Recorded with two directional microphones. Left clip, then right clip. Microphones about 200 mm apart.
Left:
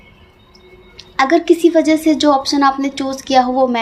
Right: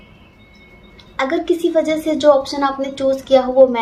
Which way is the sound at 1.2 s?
50° left (ahead or behind).